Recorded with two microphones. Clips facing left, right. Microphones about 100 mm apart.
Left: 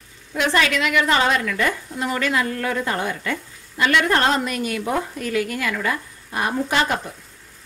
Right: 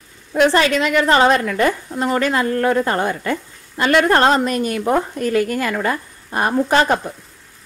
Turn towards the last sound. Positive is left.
turn(degrees=-40)  # may be behind; listen again after turning